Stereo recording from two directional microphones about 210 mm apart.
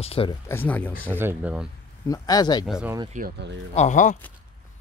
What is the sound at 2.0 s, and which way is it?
Speech, 15° left (ahead or behind).